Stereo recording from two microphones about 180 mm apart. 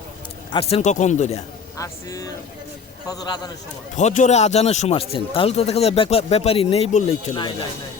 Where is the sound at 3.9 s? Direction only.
40° left (ahead or behind).